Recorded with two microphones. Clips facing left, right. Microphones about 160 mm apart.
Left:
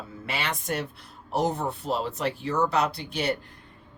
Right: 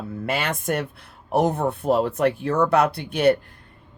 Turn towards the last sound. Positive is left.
turn(degrees=-55)  # may be behind; listen again after turning